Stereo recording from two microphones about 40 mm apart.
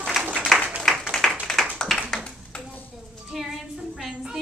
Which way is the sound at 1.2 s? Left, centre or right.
Centre.